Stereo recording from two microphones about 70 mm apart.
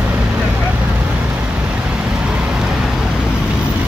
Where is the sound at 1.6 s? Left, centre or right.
Centre.